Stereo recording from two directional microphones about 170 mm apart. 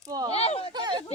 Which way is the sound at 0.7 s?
25° right (ahead or behind).